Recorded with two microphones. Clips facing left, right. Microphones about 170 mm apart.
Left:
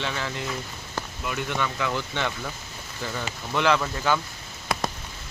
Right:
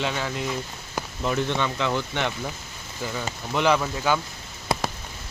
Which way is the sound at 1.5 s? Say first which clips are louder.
Right 2 dB; 20° right (ahead or behind).